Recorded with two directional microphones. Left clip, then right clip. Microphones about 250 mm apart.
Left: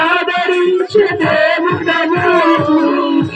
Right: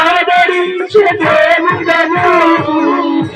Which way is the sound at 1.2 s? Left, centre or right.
Left.